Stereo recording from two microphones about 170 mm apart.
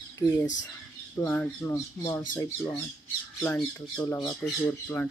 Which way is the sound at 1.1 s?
10° left (ahead or behind).